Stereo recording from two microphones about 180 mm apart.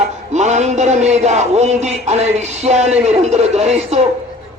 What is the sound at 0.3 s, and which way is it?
A man's voice, 40° right (ahead or behind).